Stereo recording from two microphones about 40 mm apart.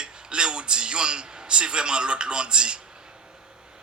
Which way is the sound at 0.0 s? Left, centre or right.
Right.